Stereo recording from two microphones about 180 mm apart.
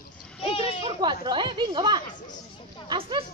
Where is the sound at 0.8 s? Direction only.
25° right (ahead or behind).